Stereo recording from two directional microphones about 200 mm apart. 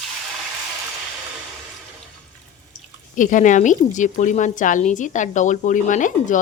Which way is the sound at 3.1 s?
40° left (ahead or behind).